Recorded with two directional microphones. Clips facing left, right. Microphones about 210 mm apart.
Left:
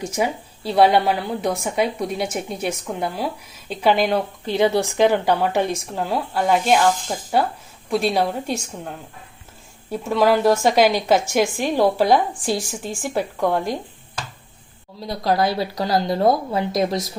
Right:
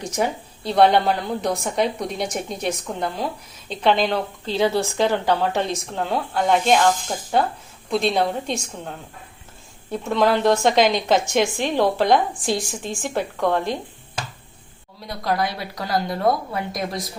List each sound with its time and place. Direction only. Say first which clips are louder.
0.0 s a woman's voice: left 1 dB; 5° left (ahead or behind)
9.9 s a woman's voice: left 2 dB; 5° left (ahead or behind)
15.0 s speech: left 4 dB; 30° left (ahead or behind)